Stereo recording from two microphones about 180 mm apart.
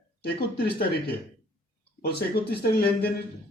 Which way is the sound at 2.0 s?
60° left (ahead or behind).